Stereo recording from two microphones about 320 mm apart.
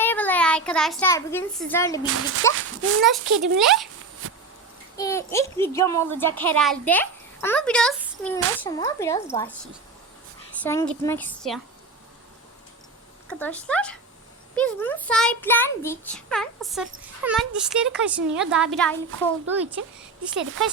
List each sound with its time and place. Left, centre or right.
0.0 s a child's voice: centre
2.0 s speech: right
3.6 s a child's voice: centre
4.9 s a child's voice: centre
10.6 s a child's voice: centre
13.2 s a child's voice: centre